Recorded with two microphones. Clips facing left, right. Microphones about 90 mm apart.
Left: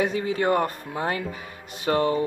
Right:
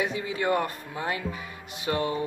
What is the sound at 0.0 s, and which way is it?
Speech, 40° left (ahead or behind).